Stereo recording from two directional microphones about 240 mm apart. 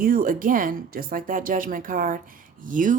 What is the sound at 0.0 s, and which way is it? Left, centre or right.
Speech, right.